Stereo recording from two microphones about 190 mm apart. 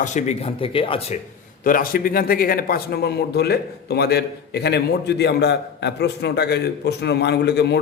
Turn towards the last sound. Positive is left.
turn(degrees=60)  # may be behind; listen again after turning